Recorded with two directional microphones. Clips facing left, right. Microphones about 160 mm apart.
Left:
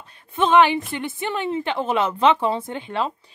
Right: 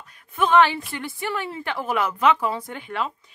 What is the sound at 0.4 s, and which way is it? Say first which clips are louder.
Speech: left 2 dB; 20° left (ahead or behind).